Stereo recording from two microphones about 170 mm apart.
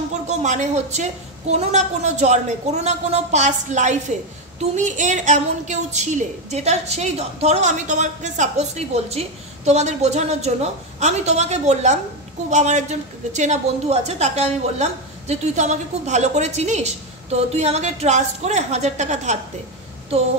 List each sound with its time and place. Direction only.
0.3 s a woman's voice: 45° right (ahead or behind)